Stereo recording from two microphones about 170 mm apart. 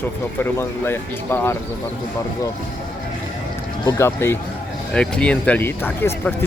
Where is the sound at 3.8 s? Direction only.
15° left (ahead or behind).